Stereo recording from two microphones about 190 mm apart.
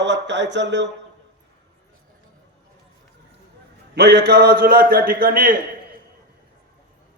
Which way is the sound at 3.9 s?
60° right (ahead or behind).